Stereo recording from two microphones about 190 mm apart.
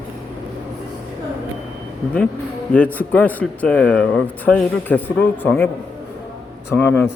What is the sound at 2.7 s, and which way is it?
Speech, 10° left (ahead or behind).